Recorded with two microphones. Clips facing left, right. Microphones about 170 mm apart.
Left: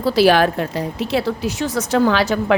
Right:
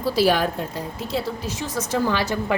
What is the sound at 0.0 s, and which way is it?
A woman's voice, 70° left (ahead or behind).